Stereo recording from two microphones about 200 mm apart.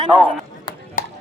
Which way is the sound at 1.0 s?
45° left (ahead or behind).